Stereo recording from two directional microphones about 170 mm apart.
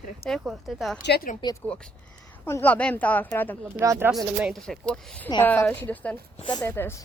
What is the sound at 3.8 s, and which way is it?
Speech, 20° right (ahead or behind).